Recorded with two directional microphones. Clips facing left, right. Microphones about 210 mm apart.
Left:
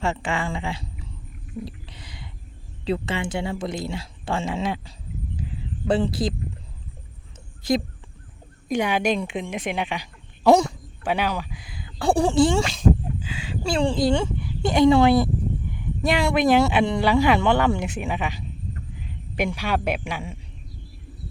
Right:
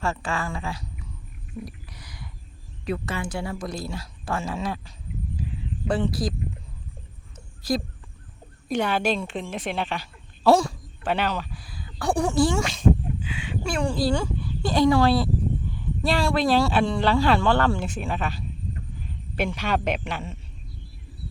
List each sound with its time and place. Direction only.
0.0 s speech: 25° left (ahead or behind)
1.6 s a sound: 25° left (ahead or behind)
2.8 s speech: 25° left (ahead or behind)
5.9 s speech: 25° left (ahead or behind)
8.7 s a woman's voice: 15° left (ahead or behind)